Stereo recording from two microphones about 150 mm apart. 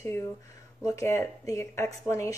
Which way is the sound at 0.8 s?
20° left (ahead or behind).